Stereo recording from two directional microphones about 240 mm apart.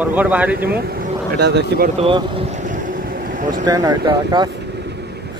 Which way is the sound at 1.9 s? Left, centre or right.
Right.